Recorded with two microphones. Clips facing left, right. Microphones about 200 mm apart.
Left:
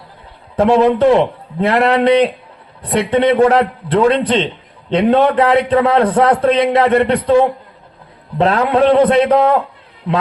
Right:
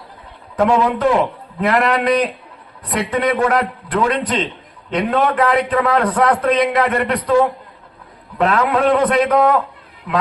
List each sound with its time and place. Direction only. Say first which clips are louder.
0.5 s a man's voice: left 4 dB; 30° left (ahead or behind)